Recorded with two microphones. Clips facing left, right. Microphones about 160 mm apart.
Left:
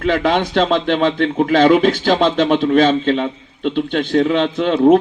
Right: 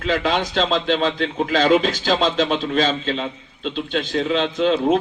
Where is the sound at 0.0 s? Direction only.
55° left (ahead or behind).